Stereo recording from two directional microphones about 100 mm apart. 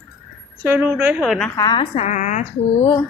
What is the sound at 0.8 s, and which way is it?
Speech, 10° right (ahead or behind).